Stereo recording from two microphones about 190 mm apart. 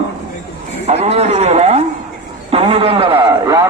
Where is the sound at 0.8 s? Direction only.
35° right (ahead or behind).